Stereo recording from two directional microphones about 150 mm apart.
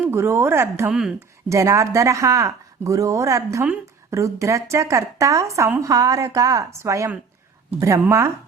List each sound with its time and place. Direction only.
0.0 s a woman's voice: 15° right (ahead or behind)